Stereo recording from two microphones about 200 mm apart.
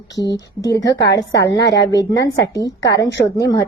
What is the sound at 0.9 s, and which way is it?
Speech, 55° left (ahead or behind).